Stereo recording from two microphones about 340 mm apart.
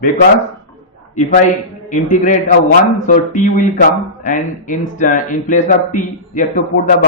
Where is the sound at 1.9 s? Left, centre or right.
Left.